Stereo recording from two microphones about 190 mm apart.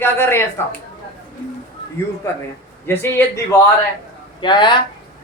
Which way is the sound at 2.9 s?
10° left (ahead or behind).